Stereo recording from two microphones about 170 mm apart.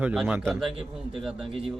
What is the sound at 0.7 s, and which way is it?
Speech, 30° right (ahead or behind).